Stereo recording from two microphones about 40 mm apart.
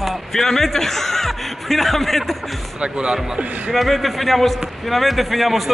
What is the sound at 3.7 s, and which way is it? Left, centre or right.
A man's voice, centre.